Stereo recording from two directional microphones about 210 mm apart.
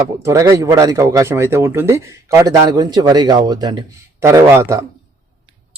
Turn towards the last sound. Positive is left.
turn(degrees=-15)  # may be behind; listen again after turning